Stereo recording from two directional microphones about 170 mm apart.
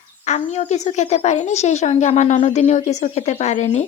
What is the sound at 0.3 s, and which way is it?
A woman's voice, 40° left (ahead or behind).